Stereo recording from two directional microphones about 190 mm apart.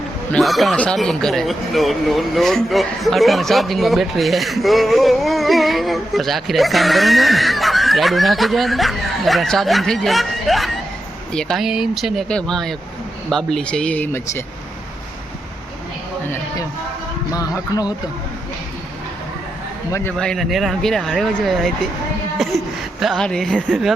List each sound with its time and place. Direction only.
0.3 s speech: centre (ahead or behind)
17.3 s speech: 20° left (ahead or behind)
19.9 s speech: 5° left (ahead or behind)
22.4 s a sound: centre (ahead or behind)